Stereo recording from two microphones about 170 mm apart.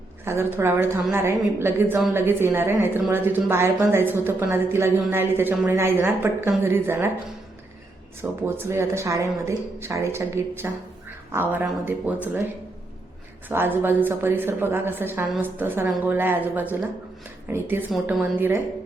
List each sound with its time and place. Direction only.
0.3 s a woman's voice: 15° right (ahead or behind)
8.2 s a woman's voice: 15° right (ahead or behind)
13.5 s a woman's voice: 10° right (ahead or behind)